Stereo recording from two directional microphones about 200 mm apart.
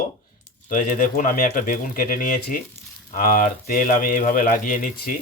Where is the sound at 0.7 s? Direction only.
40° left (ahead or behind).